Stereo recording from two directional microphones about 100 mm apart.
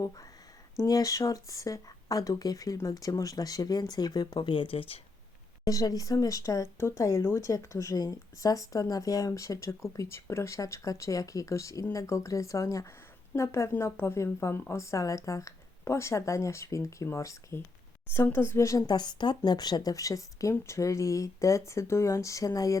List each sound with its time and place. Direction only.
0.8 s speech: 35° left (ahead or behind); by 4.9 s 70° left (ahead or behind)
5.6 s a woman's voice: 35° left (ahead or behind)